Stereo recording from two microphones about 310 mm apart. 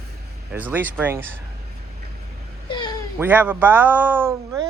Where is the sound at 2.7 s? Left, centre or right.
Centre.